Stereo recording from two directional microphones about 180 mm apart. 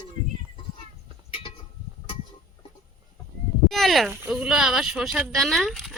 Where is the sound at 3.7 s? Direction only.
Centre (ahead or behind).